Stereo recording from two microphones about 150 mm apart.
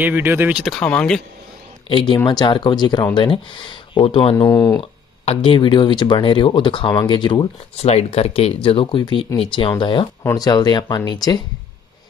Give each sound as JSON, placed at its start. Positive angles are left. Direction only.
{"t": 0.0, "sound": "speech", "side_deg": -15}
{"t": 0.7, "sound": "speech", "side_deg": 5}
{"t": 1.9, "sound": "speech", "side_deg": 35}
{"t": 4.5, "sound": "speech", "side_deg": 20}
{"t": 5.2, "sound": "speech", "side_deg": 40}
{"t": 7.8, "sound": "speech", "side_deg": 45}